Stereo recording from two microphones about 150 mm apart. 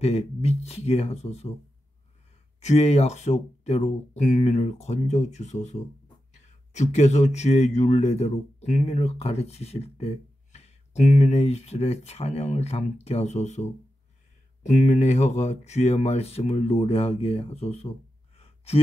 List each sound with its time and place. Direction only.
0.0 s speech: 45° left (ahead or behind)
2.6 s speech: 45° left (ahead or behind)
18.4 s a sound: 45° left (ahead or behind)